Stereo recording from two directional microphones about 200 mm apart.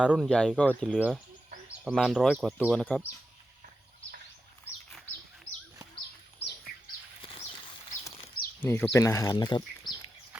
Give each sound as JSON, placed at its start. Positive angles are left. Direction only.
{"t": 0.0, "sound": "speech", "side_deg": -5}
{"t": 0.9, "sound": "speech", "side_deg": -5}
{"t": 7.2, "sound": "bird flight", "side_deg": 25}
{"t": 8.6, "sound": "speech", "side_deg": 10}